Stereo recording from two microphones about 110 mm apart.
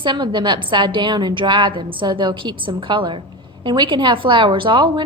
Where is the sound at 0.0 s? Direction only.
45° right (ahead or behind).